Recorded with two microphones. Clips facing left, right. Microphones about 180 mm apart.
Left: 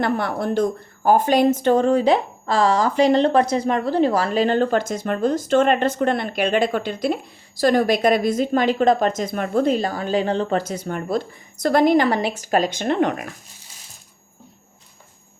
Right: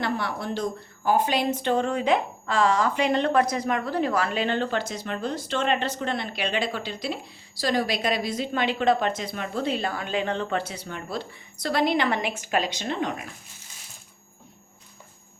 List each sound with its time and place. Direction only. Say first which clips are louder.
0.0 s speech: left 6 dB; 50° left (ahead or behind)